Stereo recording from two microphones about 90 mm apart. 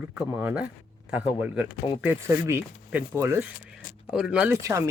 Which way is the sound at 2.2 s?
30° right (ahead or behind).